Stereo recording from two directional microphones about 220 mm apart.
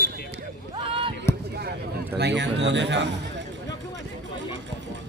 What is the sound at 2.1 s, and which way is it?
Speech, 50° right (ahead or behind).